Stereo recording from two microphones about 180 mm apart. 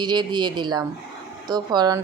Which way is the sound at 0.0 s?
25° right (ahead or behind).